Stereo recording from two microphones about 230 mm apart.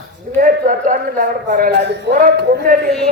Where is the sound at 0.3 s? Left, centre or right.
Right.